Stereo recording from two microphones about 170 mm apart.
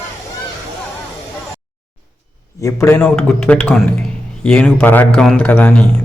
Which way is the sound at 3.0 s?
5° left (ahead or behind).